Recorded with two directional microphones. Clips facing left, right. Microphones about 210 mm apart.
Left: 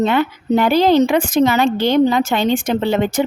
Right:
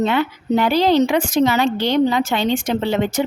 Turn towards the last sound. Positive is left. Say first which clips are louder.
# left 2 dB
turn(degrees=50)  # may be behind; listen again after turning